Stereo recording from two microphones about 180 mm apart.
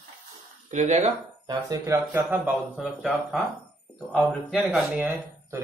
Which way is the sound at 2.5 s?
Centre (ahead or behind).